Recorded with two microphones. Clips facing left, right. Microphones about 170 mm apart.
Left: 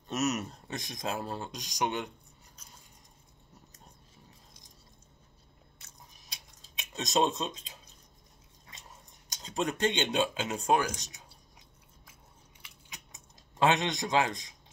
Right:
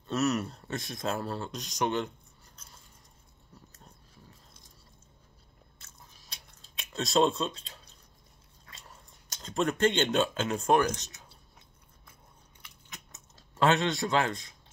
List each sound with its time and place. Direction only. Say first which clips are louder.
0.1 s speech: right 3 dB; 20° left (ahead or behind)
5.8 s chewing: even; 15° left (ahead or behind)
8.6 s speech: right 1 dB; 20° left (ahead or behind)
12.9 s a sound: right 2 dB; 15° left (ahead or behind)